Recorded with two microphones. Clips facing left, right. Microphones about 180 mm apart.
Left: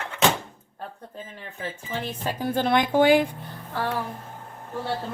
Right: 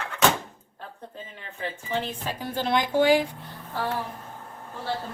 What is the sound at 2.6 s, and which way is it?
Speech, 55° left (ahead or behind).